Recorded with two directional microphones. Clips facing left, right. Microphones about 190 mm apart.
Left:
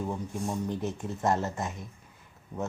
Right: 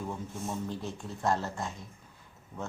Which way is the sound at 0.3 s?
Centre (ahead or behind).